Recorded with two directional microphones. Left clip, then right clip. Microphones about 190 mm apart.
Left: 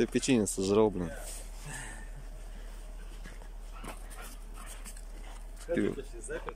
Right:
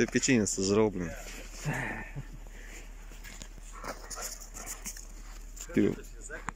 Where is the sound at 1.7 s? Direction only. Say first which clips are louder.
Right 10 dB; 25° right (ahead or behind).